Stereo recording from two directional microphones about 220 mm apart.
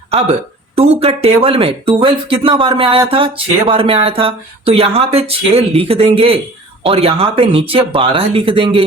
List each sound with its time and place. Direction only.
0.8 s speech: 25° right (ahead or behind)